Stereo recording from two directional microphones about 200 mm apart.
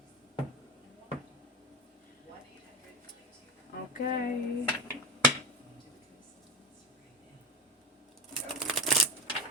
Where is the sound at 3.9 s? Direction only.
45° left (ahead or behind).